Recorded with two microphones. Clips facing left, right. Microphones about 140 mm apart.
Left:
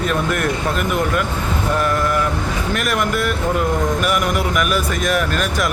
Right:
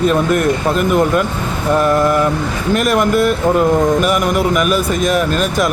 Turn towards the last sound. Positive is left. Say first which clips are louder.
# right 5 dB
turn(degrees=-25)  # may be behind; listen again after turning